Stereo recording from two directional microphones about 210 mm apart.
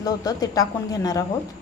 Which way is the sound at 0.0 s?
15° left (ahead or behind).